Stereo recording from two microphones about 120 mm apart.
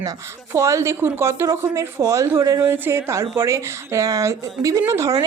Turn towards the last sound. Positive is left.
turn(degrees=-25)  # may be behind; listen again after turning